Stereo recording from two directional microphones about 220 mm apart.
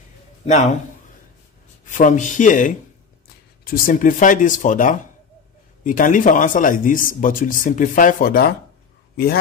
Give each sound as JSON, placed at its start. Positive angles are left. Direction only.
{"t": 0.5, "sound": "speech", "side_deg": 30}
{"t": 1.9, "sound": "speech", "side_deg": 35}